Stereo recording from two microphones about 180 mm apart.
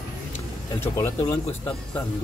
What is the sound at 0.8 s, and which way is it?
Speech, 20° left (ahead or behind).